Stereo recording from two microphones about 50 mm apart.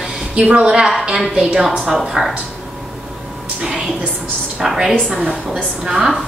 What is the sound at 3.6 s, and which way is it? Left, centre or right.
Music, centre.